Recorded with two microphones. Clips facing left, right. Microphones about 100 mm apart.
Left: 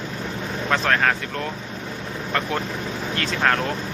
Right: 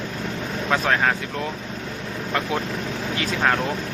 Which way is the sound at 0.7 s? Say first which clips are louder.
Even; 10° right (ahead or behind).